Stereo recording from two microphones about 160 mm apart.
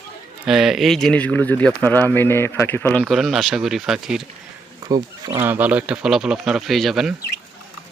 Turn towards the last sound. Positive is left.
turn(degrees=0)  # may be behind; listen again after turning